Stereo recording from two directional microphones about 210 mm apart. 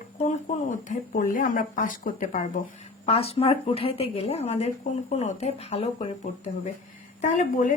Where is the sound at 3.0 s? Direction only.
30° left (ahead or behind).